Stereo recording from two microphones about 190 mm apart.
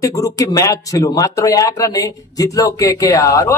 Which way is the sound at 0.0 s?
15° left (ahead or behind).